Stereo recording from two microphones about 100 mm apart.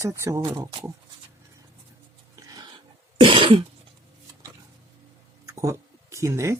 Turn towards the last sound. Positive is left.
turn(degrees=-30)  # may be behind; listen again after turning